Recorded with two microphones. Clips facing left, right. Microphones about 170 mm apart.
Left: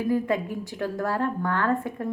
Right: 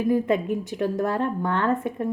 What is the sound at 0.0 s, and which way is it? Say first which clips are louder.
A woman's voice: right 3 dB; 20° right (ahead or behind).